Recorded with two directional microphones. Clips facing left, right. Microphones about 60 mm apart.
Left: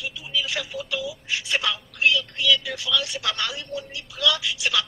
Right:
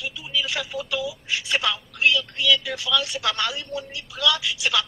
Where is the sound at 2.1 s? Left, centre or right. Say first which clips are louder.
Right 1 dB; right.